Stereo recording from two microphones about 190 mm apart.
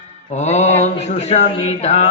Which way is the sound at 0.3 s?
35° left (ahead or behind).